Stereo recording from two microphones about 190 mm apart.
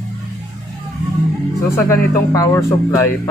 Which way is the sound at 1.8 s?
10° left (ahead or behind).